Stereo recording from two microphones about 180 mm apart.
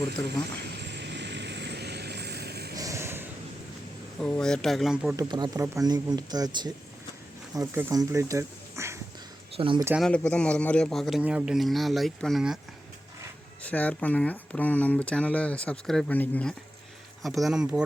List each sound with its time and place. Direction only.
0.8 s vehicle: 70° right (ahead or behind)
2.7 s a sound: 15° right (ahead or behind)
4.2 s a man's voice: 5° left (ahead or behind)
5.1 s speech: 20° right (ahead or behind)
9.6 s speech: 30° right (ahead or behind)
10.0 s a man's voice: 5° left (ahead or behind)
13.6 s a man's voice: 10° left (ahead or behind)